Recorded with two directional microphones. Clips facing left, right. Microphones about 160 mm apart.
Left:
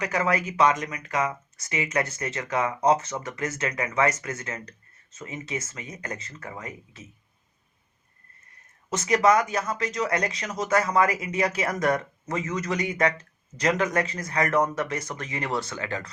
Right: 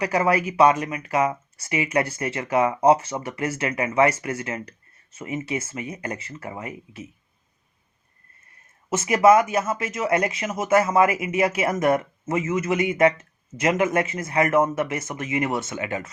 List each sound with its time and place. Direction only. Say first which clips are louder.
0.0 s speech: right 4 dB; 30° right (ahead or behind)
8.9 s speech: right 5 dB; 25° right (ahead or behind)